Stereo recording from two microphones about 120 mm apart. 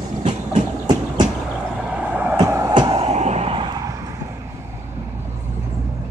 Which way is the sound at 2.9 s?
65° right (ahead or behind).